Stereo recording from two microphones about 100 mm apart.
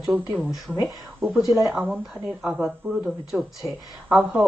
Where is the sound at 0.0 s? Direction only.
5° right (ahead or behind).